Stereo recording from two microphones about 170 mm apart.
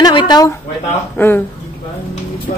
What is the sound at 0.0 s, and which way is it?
Speech, 25° left (ahead or behind).